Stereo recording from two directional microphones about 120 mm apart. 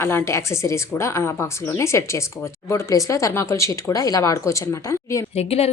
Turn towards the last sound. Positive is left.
turn(degrees=60)  # may be behind; listen again after turning